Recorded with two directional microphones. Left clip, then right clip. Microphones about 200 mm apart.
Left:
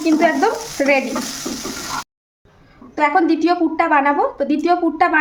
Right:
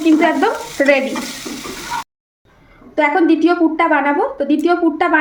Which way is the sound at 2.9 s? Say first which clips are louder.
Right 2 dB; 20° left (ahead or behind).